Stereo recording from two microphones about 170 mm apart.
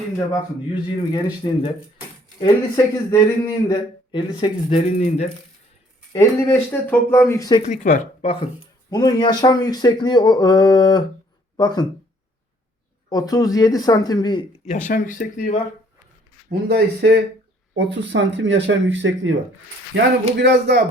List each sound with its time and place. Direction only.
1.1 s speech: 25° left (ahead or behind)
4.9 s speech: 40° left (ahead or behind)
6.1 s speech: 15° left (ahead or behind)
7.6 s speech: 45° left (ahead or behind)
8.9 s speech: 25° left (ahead or behind)
13.1 s speech: 20° left (ahead or behind); by 15.6 s 50° left (ahead or behind)
16.5 s speech: 70° right (ahead or behind)
17.7 s speech: 90° right